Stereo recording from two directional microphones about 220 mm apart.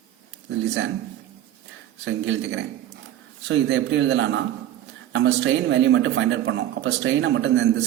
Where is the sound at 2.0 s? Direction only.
55° right (ahead or behind).